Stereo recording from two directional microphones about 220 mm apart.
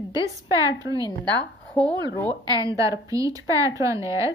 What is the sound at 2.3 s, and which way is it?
A woman's voice, 15° right (ahead or behind).